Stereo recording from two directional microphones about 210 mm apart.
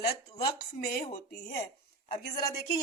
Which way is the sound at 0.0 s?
45° left (ahead or behind).